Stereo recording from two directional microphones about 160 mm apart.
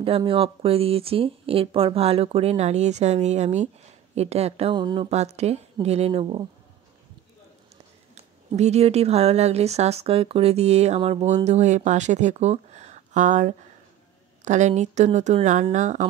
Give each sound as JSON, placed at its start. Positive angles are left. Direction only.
{"t": 0.0, "sound": "speech", "side_deg": -35}
{"t": 5.1, "sound": "speech", "side_deg": -45}
{"t": 7.7, "sound": "a woman's voice", "side_deg": -45}